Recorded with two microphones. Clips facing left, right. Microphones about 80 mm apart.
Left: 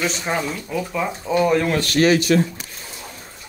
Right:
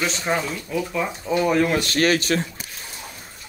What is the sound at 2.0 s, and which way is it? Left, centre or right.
Speech, right.